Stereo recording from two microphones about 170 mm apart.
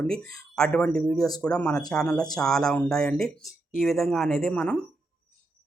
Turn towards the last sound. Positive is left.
turn(degrees=5)  # may be behind; listen again after turning